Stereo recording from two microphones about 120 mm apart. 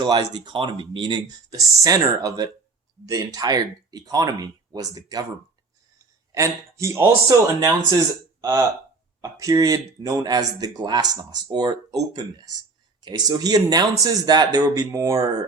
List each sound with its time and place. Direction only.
0.0 s speech: 35° right (ahead or behind)
1.5 s speech: 30° right (ahead or behind)
6.3 s a man's voice: 25° right (ahead or behind)